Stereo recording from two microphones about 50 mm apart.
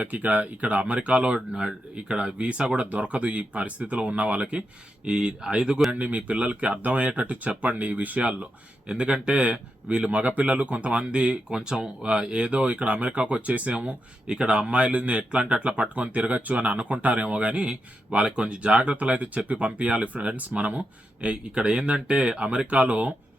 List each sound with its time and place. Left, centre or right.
0.0 s speech: right
5.9 s speech: right
8.9 s speech: centre